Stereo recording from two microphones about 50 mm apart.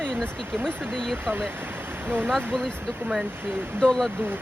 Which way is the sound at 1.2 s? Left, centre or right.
Right.